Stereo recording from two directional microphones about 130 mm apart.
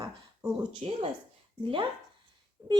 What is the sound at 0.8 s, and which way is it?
Speech, 45° right (ahead or behind).